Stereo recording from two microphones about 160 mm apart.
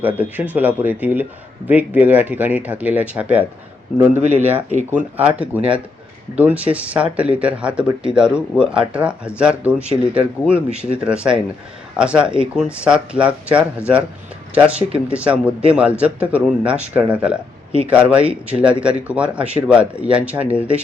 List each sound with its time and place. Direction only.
0.0 s speech: 10° right (ahead or behind)